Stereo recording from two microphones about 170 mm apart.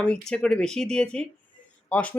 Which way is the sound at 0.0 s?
5° left (ahead or behind).